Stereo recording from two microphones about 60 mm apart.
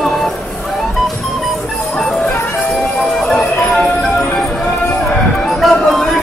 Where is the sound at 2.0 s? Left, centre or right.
Centre.